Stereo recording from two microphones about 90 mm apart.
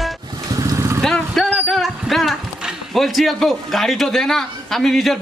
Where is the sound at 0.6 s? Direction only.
40° right (ahead or behind).